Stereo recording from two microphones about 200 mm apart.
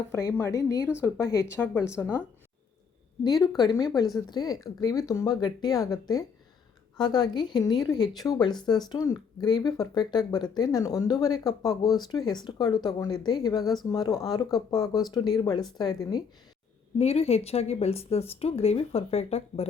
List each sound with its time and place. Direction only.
0.1 s speech: 15° left (ahead or behind)
3.2 s speech: 20° left (ahead or behind)
17.0 s speech: 30° left (ahead or behind)